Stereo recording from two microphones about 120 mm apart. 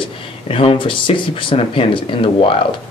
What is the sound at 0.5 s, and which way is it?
Speech, 50° left (ahead or behind).